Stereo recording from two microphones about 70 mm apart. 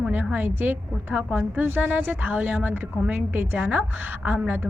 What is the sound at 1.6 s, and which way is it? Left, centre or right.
A woman's voice, right.